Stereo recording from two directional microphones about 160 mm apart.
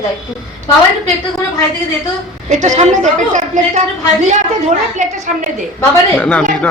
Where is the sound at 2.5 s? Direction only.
50° right (ahead or behind).